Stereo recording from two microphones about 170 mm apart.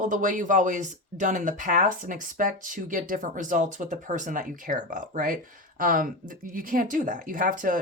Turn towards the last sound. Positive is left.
turn(degrees=-50)  # may be behind; listen again after turning